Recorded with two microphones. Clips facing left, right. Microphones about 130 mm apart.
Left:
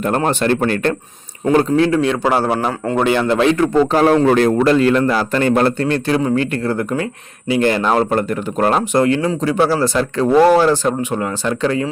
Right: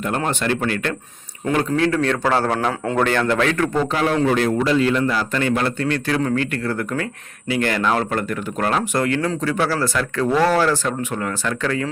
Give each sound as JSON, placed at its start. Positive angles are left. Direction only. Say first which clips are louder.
{"t": 0.0, "sound": "speech", "louder": "left 6 dB", "side_deg": 35}
{"t": 1.7, "sound": "a man's voice", "louder": "left 4 dB", "side_deg": 15}
{"t": 3.9, "sound": "a man's voice", "louder": "left 6 dB", "side_deg": 40}